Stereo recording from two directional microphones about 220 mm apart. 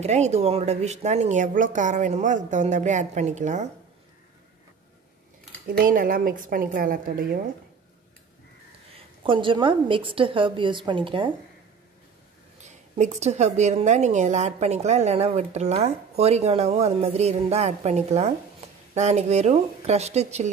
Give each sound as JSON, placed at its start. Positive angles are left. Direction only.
{"t": 0.0, "sound": "speech", "side_deg": -30}
{"t": 5.7, "sound": "speech", "side_deg": -40}
{"t": 9.2, "sound": "a woman's voice", "side_deg": -25}
{"t": 12.6, "sound": "a woman's voice", "side_deg": -30}